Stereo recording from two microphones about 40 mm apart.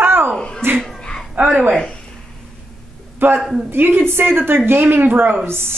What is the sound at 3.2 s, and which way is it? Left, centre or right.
A woman's voice, right.